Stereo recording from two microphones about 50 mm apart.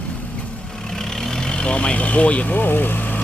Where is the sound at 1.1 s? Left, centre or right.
Centre; by 3.2 s left.